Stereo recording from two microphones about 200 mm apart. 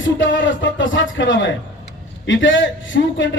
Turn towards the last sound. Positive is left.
turn(degrees=70)  # may be behind; listen again after turning